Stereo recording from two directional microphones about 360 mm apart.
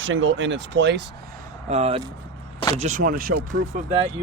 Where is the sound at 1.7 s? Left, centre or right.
Centre.